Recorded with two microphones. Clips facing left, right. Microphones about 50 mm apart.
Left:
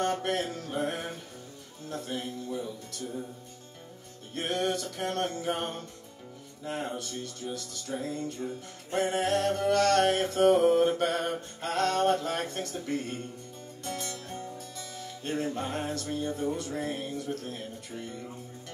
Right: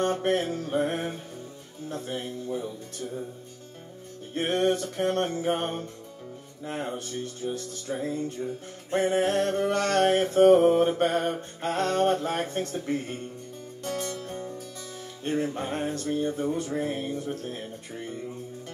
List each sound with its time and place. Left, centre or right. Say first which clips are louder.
0.0 s mantra: right 4 dB; right
4.3 s mantra: right 5 dB; right
8.4 s music: right 3 dB; centre
8.9 s mantra: right 3 dB; right
13.8 s music: right 5 dB; right
15.2 s mantra: right 3 dB; right